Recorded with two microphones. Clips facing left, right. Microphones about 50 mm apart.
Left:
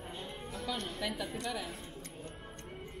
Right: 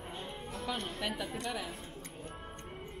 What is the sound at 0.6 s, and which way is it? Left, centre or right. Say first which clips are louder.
Speech: even; right.